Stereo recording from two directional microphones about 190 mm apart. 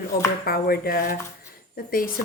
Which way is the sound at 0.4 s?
50° left (ahead or behind).